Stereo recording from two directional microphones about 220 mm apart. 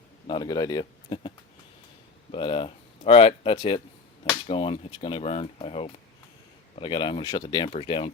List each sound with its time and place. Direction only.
0.3 s speech: 20° left (ahead or behind)
2.3 s speech: 25° left (ahead or behind)